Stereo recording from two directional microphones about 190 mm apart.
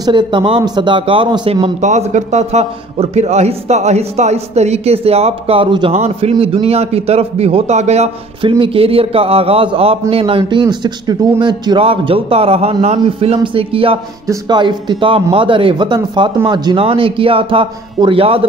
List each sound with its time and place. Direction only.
0.0 s a man's voice: 25° right (ahead or behind)